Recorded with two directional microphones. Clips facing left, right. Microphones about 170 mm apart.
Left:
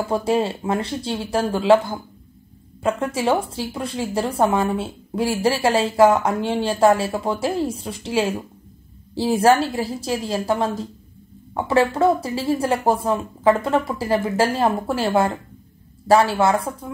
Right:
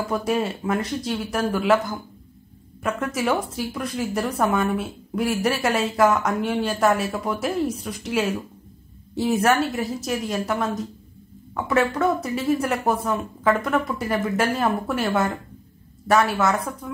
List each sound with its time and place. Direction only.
0.1 s speech: 30° left (ahead or behind)